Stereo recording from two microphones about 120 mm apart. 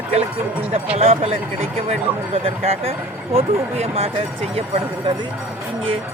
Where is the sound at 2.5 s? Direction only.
55° right (ahead or behind).